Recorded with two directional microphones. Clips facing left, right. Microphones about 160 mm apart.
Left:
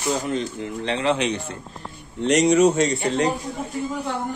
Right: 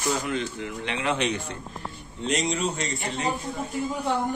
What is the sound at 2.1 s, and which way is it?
Speech, 70° left (ahead or behind).